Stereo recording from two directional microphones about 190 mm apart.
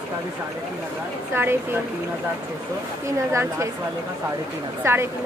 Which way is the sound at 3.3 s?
15° right (ahead or behind).